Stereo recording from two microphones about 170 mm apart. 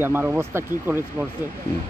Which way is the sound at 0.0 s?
10° right (ahead or behind).